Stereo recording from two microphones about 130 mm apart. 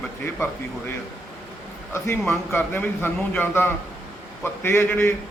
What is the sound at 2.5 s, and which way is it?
A man's voice, 15° left (ahead or behind).